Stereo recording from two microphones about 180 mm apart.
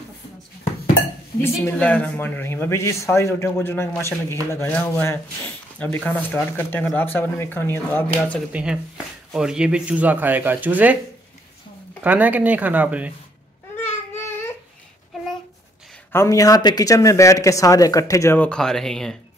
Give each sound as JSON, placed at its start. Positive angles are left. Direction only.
{"t": 1.6, "sound": "speech", "side_deg": 10}
{"t": 8.5, "sound": "speech", "side_deg": -5}
{"t": 12.0, "sound": "speech", "side_deg": -10}
{"t": 13.7, "sound": "a sound", "side_deg": 10}
{"t": 16.1, "sound": "speech", "side_deg": 15}